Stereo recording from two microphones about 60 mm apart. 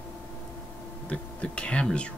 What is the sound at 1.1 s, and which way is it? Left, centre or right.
Speech, centre.